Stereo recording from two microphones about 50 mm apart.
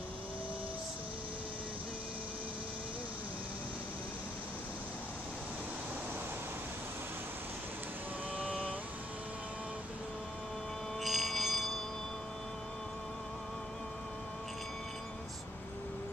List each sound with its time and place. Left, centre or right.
8.4 s vehicle: right
11.0 s bell: centre